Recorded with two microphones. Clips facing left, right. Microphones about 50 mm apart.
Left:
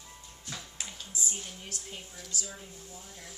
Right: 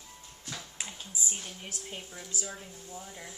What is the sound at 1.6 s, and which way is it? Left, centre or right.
A woman's voice, centre.